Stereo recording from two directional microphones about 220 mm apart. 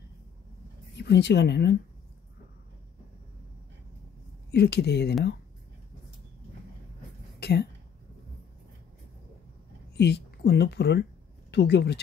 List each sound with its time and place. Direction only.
0.9 s speech: 50° left (ahead or behind)
4.5 s speech: 50° left (ahead or behind)
7.3 s a sound: 50° left (ahead or behind)
9.9 s speech: 50° left (ahead or behind)